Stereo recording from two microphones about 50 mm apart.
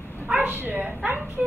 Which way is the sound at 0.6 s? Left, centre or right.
Right.